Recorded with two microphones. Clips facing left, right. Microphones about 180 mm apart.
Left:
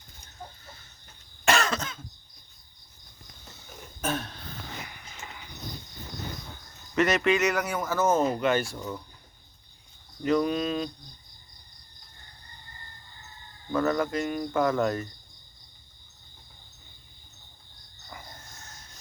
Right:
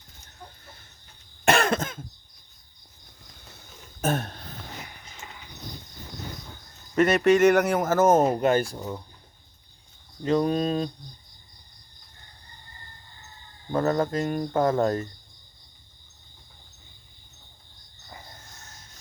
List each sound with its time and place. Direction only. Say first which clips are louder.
1.5 s cough: right 4 dB; 55° right (ahead or behind)
4.0 s a sound: right 4 dB; 45° right (ahead or behind)
6.9 s speech: right 4 dB; 45° right (ahead or behind)
10.2 s speech: right 2 dB; 35° right (ahead or behind)
13.7 s speech: right 2 dB; 30° right (ahead or behind)